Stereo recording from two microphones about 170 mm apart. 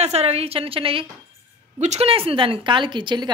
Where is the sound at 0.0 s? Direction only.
40° right (ahead or behind).